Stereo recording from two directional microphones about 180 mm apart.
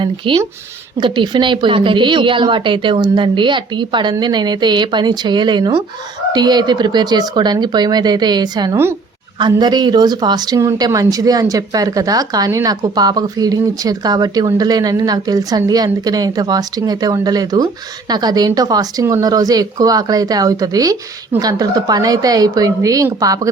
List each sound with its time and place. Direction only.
0.0 s speech: 25° right (ahead or behind)